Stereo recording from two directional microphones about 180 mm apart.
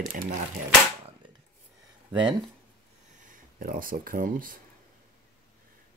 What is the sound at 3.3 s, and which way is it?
Speech, 50° right (ahead or behind).